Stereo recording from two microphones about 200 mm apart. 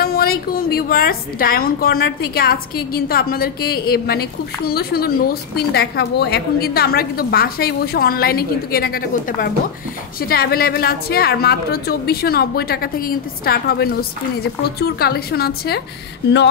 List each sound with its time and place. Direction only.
0.0 s a woman's voice: 45° left (ahead or behind)